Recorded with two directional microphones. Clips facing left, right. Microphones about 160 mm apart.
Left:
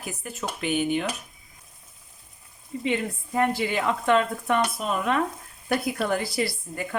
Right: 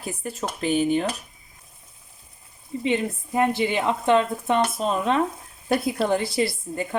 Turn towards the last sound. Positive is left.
turn(degrees=-25)  # may be behind; listen again after turning